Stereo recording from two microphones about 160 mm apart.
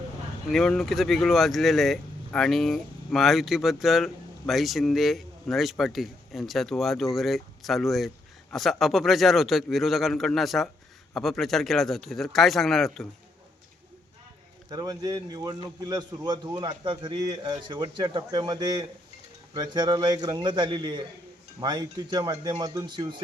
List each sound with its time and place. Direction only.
0.4 s speech: centre (ahead or behind)
14.7 s a man's voice: 25° right (ahead or behind)